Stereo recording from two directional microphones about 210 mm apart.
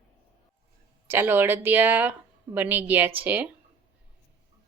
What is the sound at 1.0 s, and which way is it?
Speech, 10° right (ahead or behind).